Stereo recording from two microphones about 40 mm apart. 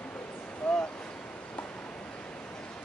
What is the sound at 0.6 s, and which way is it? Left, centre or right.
Vehicle, left.